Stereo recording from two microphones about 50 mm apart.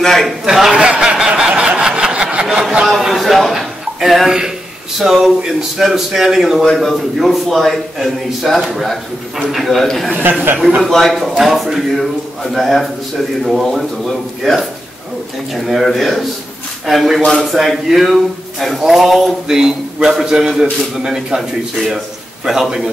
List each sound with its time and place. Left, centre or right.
0.0 s a man's voice: centre
0.5 s a man's voice: centre
0.8 s a sound: centre
4.9 s a man's voice: centre
6.6 s a man's voice: centre